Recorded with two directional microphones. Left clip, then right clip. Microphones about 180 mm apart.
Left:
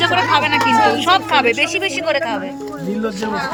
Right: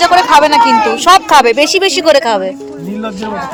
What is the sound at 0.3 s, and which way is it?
Speech, 25° right (ahead or behind).